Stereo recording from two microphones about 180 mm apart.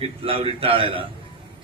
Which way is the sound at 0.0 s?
30° right (ahead or behind).